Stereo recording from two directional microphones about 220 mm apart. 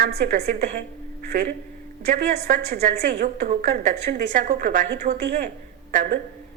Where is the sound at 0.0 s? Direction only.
40° right (ahead or behind).